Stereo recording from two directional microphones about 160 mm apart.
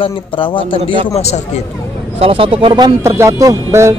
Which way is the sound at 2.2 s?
35° right (ahead or behind).